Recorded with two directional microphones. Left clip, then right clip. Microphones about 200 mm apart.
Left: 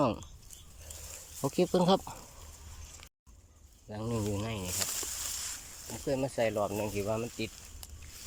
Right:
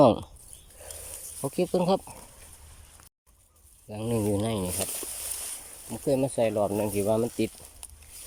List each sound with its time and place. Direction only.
0.0 s speech: 20° right (ahead or behind)
1.4 s speech: centre (ahead or behind)
3.8 s speech: 10° right (ahead or behind); by 4.9 s 25° right (ahead or behind)
6.1 s speech: 20° right (ahead or behind)